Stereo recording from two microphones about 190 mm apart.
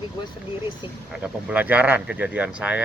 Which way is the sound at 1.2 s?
5° right (ahead or behind).